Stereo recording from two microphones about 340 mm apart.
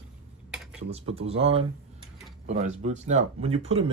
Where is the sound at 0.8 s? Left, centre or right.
Centre.